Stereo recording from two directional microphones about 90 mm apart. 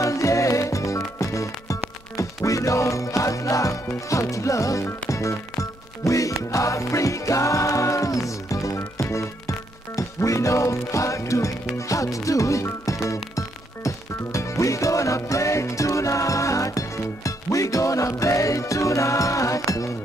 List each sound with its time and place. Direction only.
0.0 s music: 35° left (ahead or behind)